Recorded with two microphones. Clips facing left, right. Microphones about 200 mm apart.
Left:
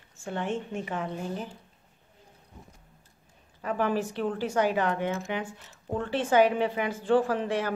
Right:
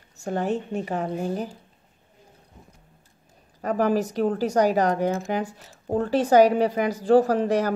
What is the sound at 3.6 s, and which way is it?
Speech, 40° right (ahead or behind).